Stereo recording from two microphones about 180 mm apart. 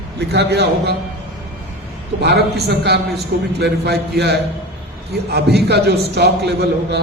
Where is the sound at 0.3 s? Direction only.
65° right (ahead or behind).